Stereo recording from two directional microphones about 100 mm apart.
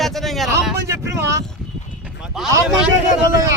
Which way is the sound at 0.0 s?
Centre (ahead or behind).